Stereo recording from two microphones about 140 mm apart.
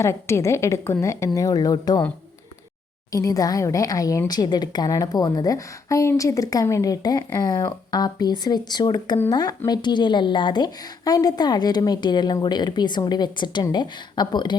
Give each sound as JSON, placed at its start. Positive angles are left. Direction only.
{"t": 0.0, "sound": "a woman's voice", "side_deg": 20}
{"t": 3.1, "sound": "a woman's voice", "side_deg": 25}